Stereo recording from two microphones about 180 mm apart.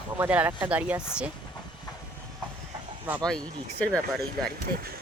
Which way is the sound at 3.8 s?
5° left (ahead or behind).